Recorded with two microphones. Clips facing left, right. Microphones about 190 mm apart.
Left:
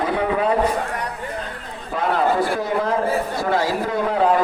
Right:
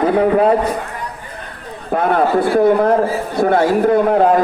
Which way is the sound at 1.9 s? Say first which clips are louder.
Right 5 dB; 55° right (ahead or behind).